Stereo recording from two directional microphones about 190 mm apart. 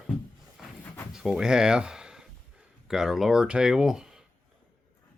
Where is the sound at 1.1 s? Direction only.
5° right (ahead or behind).